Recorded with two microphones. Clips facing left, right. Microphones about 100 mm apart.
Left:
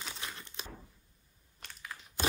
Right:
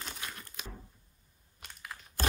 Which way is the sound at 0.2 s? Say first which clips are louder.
Even; 25° left (ahead or behind).